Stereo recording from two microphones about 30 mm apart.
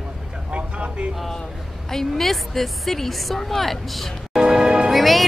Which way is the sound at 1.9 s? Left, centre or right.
Centre.